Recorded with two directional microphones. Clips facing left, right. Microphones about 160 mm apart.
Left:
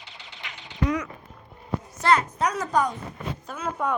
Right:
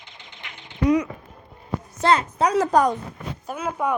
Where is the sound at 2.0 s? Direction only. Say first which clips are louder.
Right 2 dB; 25° right (ahead or behind).